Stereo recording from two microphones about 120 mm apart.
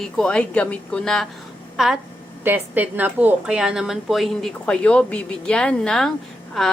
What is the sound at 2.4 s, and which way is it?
A woman's voice, 15° right (ahead or behind).